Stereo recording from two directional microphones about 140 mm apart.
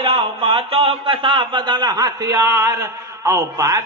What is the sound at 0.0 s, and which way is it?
A man's voice, 45° right (ahead or behind).